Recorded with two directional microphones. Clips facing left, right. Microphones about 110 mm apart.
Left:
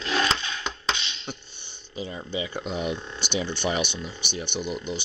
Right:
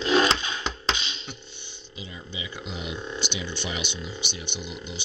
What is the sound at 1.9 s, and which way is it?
Speech, 40° left (ahead or behind).